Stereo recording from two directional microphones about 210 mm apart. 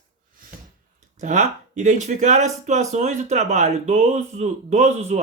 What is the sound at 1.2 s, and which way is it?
Speech, 35° right (ahead or behind).